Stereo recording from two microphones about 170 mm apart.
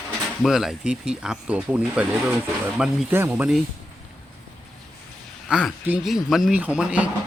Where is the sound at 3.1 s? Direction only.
10° right (ahead or behind).